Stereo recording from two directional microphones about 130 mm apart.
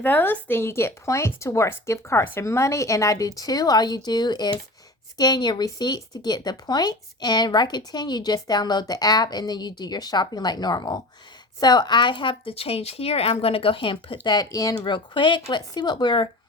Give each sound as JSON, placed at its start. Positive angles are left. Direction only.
{"t": 0.0, "sound": "speech", "side_deg": 15}